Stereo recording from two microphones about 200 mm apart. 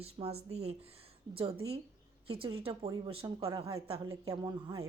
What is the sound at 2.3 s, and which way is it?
Speech, 25° right (ahead or behind).